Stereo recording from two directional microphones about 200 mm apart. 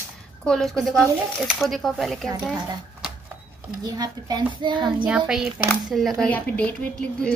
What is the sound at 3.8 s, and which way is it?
Speech, 20° right (ahead or behind).